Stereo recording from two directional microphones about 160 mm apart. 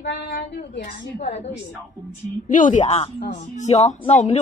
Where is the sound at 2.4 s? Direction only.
55° left (ahead or behind).